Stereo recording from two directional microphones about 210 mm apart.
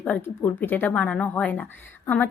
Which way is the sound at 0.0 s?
10° left (ahead or behind).